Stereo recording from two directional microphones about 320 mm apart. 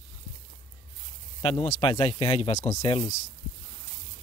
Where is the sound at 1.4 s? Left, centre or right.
Centre.